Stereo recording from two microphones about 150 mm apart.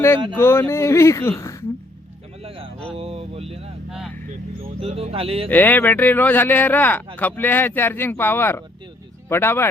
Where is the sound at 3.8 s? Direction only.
5° right (ahead or behind).